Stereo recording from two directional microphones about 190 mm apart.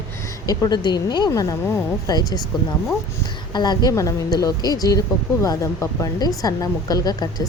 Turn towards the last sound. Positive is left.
turn(degrees=20)  # may be behind; listen again after turning